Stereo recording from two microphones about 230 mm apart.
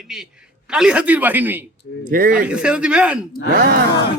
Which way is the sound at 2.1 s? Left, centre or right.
Right.